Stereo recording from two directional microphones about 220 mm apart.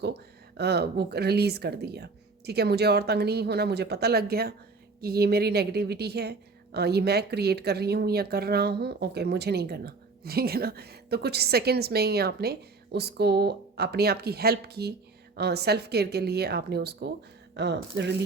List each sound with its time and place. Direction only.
0.0 s a woman's voice: 50° right (ahead or behind)